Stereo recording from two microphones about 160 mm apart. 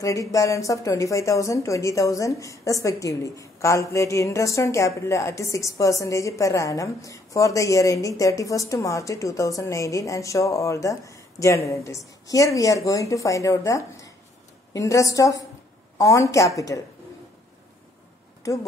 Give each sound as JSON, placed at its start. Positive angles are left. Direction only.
{"t": 0.0, "sound": "a woman's voice", "side_deg": 20}
{"t": 18.4, "sound": "a woman's voice", "side_deg": 20}